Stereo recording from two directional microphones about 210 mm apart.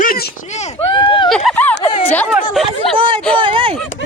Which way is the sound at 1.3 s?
5° left (ahead or behind).